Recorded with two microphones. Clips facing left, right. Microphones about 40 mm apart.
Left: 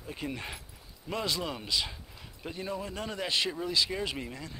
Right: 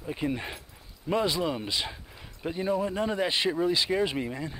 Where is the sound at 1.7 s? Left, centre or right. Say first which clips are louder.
Right 1 dB; right.